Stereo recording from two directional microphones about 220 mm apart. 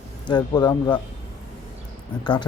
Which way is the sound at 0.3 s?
20° left (ahead or behind).